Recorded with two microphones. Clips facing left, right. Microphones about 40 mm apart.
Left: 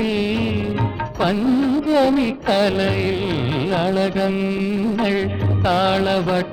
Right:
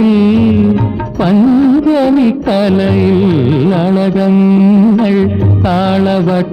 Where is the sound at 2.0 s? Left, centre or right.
Centre.